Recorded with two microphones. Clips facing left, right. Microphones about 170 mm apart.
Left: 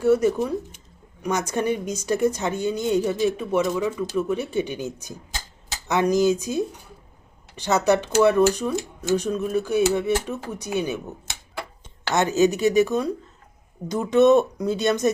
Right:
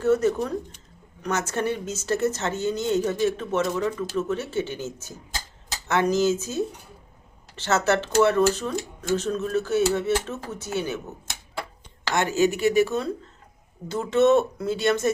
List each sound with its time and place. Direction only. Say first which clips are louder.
0.0 s speech: left 2 dB; 10° left (ahead or behind)
5.9 s speech: left 2 dB; 15° left (ahead or behind)
8.7 s speech: left 3 dB; centre (ahead or behind)
12.1 s speech: left 3 dB; 20° left (ahead or behind)